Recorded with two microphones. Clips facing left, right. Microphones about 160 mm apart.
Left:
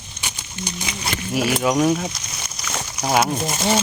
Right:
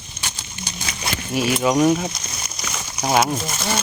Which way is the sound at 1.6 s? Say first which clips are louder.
Right 3 dB; centre (ahead or behind).